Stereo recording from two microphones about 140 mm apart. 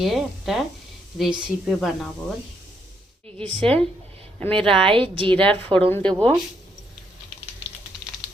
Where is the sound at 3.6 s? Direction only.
10° left (ahead or behind).